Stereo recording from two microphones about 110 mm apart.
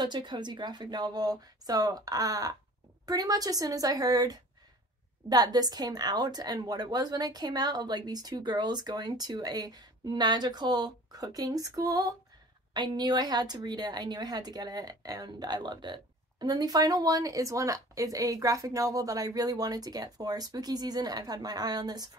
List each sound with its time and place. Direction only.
0.0 s speech: 45° right (ahead or behind)